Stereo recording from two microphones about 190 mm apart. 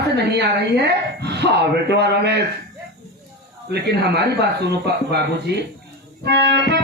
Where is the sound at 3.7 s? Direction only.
60° right (ahead or behind).